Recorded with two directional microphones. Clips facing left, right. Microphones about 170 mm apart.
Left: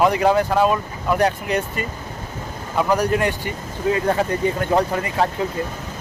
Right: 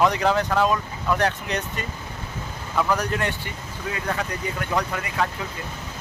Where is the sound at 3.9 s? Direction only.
30° left (ahead or behind).